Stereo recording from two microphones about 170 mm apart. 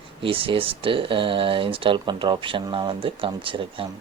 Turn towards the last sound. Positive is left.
turn(degrees=-30)  # may be behind; listen again after turning